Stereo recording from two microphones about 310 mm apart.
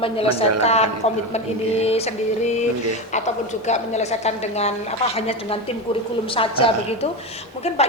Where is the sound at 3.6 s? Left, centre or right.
Left.